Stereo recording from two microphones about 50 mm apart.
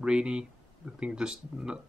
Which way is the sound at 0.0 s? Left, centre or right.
Centre.